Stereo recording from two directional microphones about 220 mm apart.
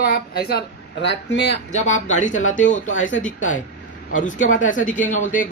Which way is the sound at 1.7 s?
35° left (ahead or behind).